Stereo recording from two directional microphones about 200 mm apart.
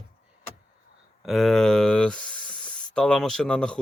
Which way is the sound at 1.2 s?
Centre (ahead or behind).